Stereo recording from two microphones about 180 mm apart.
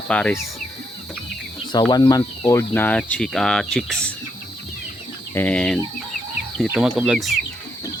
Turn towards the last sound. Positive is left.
turn(degrees=0)  # may be behind; listen again after turning